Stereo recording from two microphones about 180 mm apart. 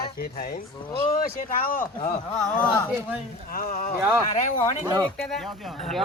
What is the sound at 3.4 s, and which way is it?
Speech, 50° left (ahead or behind).